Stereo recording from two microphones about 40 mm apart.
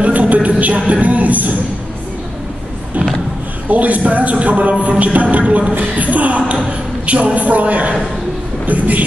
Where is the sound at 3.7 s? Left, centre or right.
Right.